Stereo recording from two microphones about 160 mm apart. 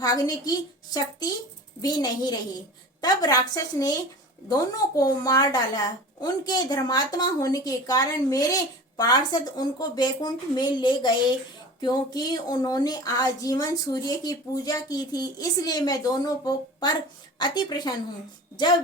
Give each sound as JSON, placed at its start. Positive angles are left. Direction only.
{"t": 0.0, "sound": "speech", "side_deg": 25}